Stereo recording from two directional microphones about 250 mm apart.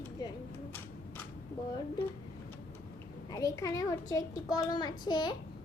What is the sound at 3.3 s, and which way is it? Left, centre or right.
A child's voice, centre.